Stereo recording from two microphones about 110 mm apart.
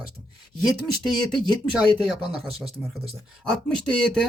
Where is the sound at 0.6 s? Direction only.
Centre (ahead or behind).